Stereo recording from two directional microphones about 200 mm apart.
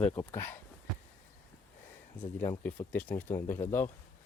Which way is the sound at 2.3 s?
10° left (ahead or behind).